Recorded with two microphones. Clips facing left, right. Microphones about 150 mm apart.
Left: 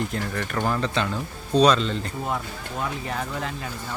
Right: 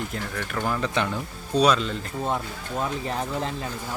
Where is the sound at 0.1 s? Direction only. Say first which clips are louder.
Left 3 dB; 5° left (ahead or behind).